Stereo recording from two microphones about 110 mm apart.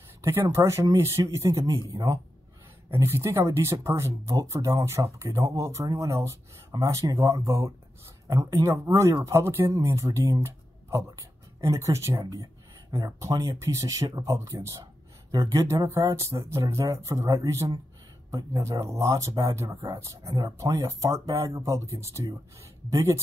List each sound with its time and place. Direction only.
0.2 s speech: 25° right (ahead or behind)